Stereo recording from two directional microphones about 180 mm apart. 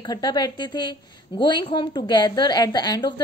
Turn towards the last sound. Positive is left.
turn(degrees=25)  # may be behind; listen again after turning